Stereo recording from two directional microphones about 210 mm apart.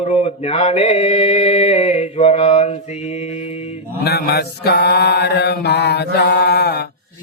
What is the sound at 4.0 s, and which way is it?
Mantra, 50° left (ahead or behind).